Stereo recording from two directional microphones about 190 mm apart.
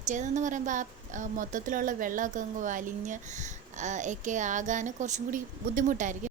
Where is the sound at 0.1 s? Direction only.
40° right (ahead or behind).